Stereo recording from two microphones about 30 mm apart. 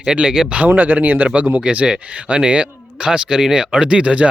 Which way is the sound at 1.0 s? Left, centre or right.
Right.